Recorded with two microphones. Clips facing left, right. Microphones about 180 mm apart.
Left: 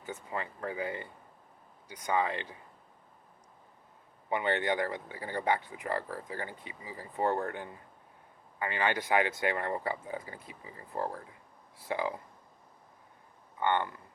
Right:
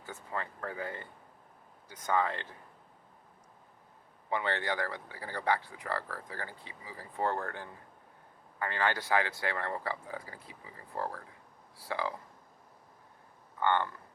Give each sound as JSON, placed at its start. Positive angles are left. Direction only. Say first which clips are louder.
{"t": 0.0, "sound": "speech", "louder": "left 2 dB", "side_deg": 15}
{"t": 4.3, "sound": "speech", "louder": "left 3 dB", "side_deg": 20}
{"t": 13.6, "sound": "speech", "louder": "even", "side_deg": 15}